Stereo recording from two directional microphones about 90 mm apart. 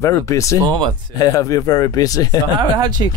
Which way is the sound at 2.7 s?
55° right (ahead or behind).